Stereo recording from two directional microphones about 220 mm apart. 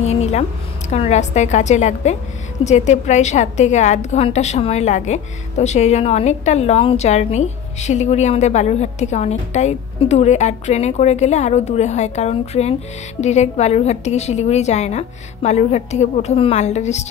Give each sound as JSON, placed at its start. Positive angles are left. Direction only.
{"t": 0.0, "sound": "a woman's voice", "side_deg": 30}